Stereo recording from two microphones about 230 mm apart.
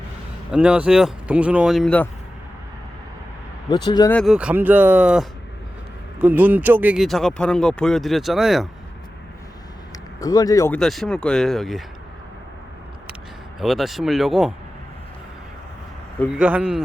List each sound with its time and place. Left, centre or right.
0.5 s speech: centre
3.8 s speech: centre
4.1 s speech: centre
10.2 s speech: centre
10.8 s speech: centre
13.6 s speech: centre
16.1 s speech: centre
16.4 s speech: centre